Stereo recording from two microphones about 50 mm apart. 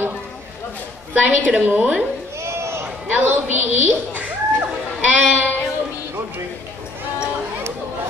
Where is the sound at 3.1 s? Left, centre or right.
Right.